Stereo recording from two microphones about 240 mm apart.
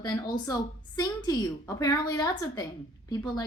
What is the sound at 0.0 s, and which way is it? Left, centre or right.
A woman's voice, centre.